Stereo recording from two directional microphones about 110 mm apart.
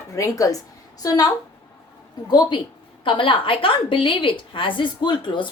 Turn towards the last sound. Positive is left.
turn(degrees=50)  # may be behind; listen again after turning